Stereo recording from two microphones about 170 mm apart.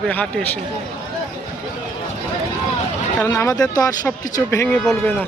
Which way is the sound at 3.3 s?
20° left (ahead or behind).